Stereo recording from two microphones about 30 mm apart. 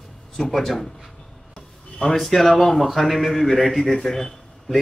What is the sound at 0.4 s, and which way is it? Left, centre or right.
A man's voice, centre.